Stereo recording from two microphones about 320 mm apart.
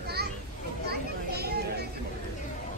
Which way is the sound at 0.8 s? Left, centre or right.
Right.